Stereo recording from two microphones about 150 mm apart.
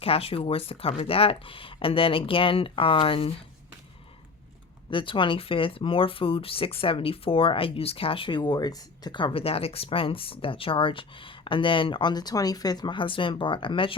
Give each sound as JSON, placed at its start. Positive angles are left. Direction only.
{"t": 0.0, "sound": "speech", "side_deg": 40}
{"t": 4.9, "sound": "speech", "side_deg": 35}